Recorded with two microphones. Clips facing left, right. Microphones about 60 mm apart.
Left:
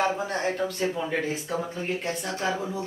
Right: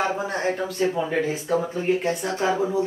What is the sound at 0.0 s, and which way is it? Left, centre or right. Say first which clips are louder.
Speech: right 2 dB; centre.